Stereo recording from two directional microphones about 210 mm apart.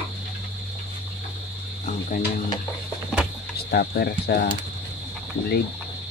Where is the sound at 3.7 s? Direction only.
50° left (ahead or behind).